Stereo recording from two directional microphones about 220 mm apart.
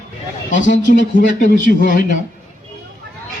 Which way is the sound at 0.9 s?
35° left (ahead or behind).